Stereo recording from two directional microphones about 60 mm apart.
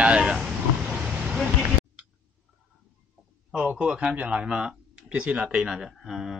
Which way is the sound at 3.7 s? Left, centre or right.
Centre.